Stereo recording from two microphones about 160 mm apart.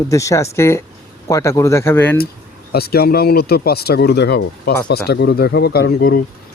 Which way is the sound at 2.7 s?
75° left (ahead or behind).